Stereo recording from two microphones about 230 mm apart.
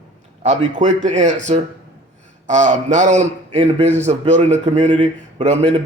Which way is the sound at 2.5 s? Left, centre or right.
Right.